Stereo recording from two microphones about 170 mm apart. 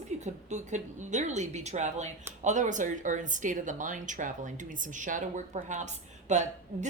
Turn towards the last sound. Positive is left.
turn(degrees=-45)  # may be behind; listen again after turning